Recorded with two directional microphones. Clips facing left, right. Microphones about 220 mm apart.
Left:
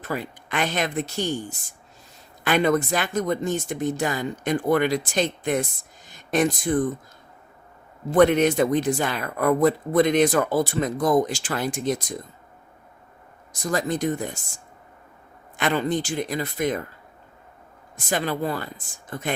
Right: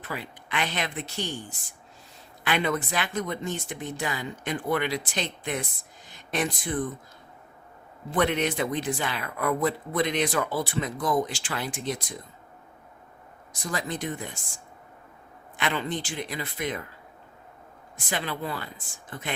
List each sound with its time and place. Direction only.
0.0 s speech: 45° left (ahead or behind)
8.1 s speech: 45° left (ahead or behind)
13.5 s speech: 45° left (ahead or behind)
15.5 s speech: 45° left (ahead or behind)
17.9 s speech: 45° left (ahead or behind)